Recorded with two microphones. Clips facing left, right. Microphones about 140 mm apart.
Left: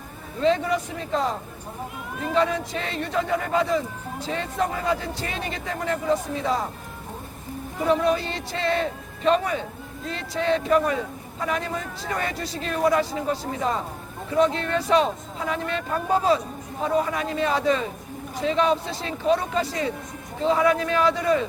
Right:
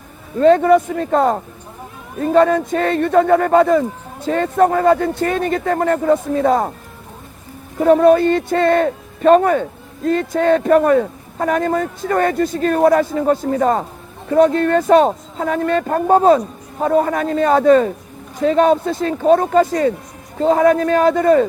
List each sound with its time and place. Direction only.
0.3 s a man's voice: 50° right (ahead or behind)
7.8 s a man's voice: 50° right (ahead or behind)